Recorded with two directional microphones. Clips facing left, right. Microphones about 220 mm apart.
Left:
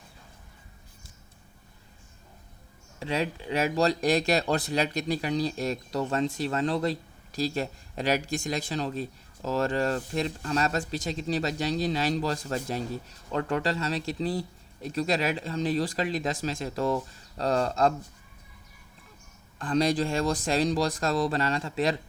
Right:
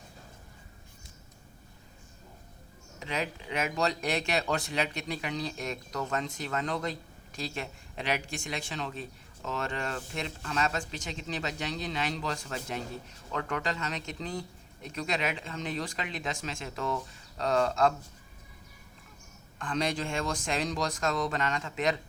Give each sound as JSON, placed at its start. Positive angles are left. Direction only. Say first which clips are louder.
{"t": 3.0, "sound": "speech", "louder": "left 5 dB", "side_deg": 30}
{"t": 19.5, "sound": "speech", "louder": "left 7 dB", "side_deg": 35}